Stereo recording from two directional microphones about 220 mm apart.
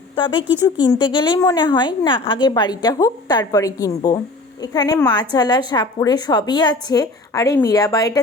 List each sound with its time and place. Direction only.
0.4 s speech: 5° right (ahead or behind)
0.9 s a woman's voice: 20° left (ahead or behind)